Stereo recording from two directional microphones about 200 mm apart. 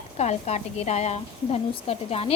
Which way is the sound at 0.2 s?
35° left (ahead or behind).